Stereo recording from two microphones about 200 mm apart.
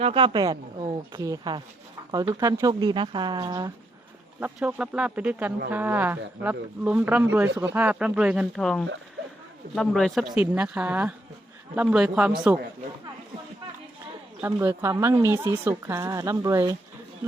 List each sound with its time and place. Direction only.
0.0 s speech: 25° right (ahead or behind)
4.4 s speech: 5° right (ahead or behind)
14.4 s speech: 15° right (ahead or behind)